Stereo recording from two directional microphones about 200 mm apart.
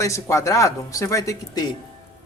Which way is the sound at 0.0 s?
15° left (ahead or behind).